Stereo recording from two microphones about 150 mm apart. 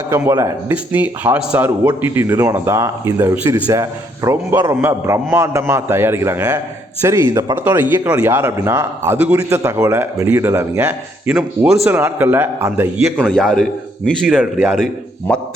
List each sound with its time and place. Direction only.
0.1 s a man's voice: 20° right (ahead or behind)